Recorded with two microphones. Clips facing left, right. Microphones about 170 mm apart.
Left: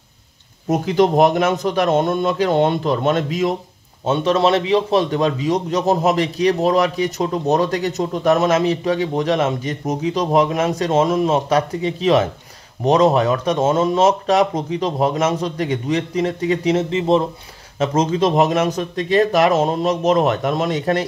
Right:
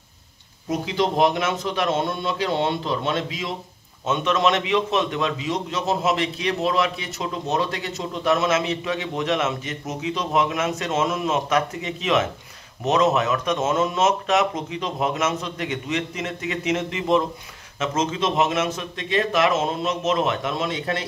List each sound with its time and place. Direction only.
0.7 s a man's voice: 50° left (ahead or behind)
4.0 s a man's voice: 35° left (ahead or behind)